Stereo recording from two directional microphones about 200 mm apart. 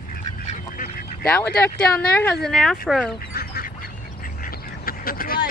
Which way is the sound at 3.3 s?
50° left (ahead or behind).